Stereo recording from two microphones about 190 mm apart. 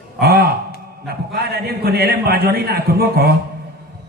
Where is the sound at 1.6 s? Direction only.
55° right (ahead or behind).